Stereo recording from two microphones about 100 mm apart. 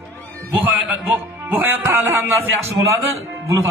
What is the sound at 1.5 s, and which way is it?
A man's voice, 20° right (ahead or behind).